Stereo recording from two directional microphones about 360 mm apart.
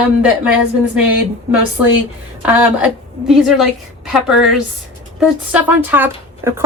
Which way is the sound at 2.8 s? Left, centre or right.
Centre.